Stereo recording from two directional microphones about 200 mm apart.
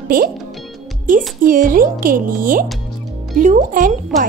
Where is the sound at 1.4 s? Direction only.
45° right (ahead or behind).